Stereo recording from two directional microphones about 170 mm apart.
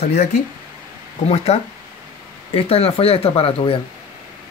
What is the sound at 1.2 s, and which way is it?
Speech, 40° left (ahead or behind).